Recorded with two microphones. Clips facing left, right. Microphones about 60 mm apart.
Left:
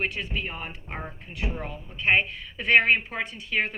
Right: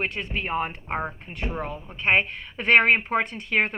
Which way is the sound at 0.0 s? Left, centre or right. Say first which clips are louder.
Right 1 dB; right.